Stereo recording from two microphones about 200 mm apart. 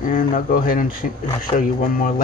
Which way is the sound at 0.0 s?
45° left (ahead or behind).